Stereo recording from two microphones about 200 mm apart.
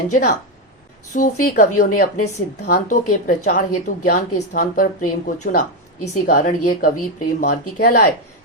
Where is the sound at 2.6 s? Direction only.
40° left (ahead or behind).